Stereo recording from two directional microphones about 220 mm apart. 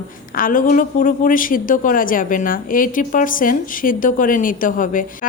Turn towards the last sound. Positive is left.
turn(degrees=40)  # may be behind; listen again after turning